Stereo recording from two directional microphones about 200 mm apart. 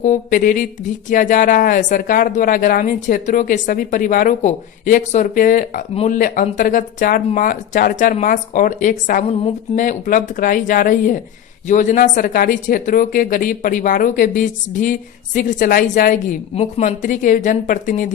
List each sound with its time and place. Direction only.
0.0 s a woman's voice: 40° left (ahead or behind)